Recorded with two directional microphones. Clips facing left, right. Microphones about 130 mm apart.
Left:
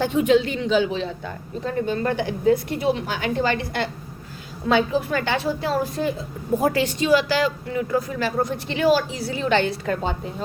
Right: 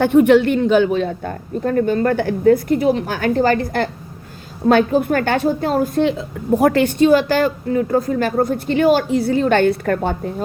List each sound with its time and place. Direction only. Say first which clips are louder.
0.0 s a woman's voice: right 7 dB; 55° right (ahead or behind)